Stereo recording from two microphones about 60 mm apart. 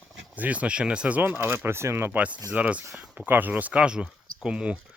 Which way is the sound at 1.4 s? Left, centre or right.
Right.